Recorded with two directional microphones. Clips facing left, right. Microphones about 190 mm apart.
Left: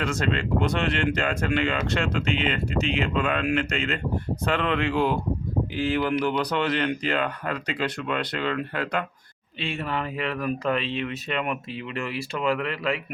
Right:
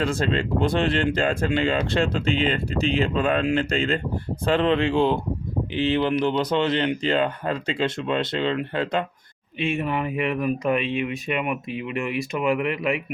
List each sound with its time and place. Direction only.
0.0 s speech: 30° right (ahead or behind)